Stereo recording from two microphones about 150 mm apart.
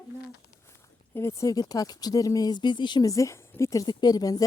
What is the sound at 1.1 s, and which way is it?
Speech, 20° left (ahead or behind).